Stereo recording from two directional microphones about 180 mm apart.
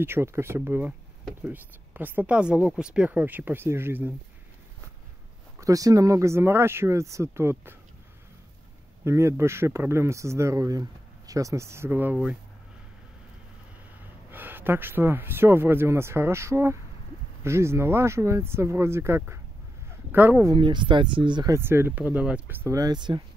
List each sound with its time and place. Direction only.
0.0 s speech: 15° right (ahead or behind)
5.6 s speech: 20° right (ahead or behind)
9.0 s speech: 15° right (ahead or behind)
14.3 s speech: 10° right (ahead or behind)
20.5 s speech: 25° right (ahead or behind)
21.5 s speech: 15° right (ahead or behind)